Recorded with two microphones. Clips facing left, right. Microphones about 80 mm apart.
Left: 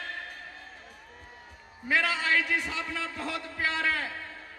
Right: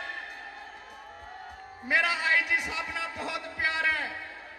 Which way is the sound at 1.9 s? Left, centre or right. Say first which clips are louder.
Even; centre.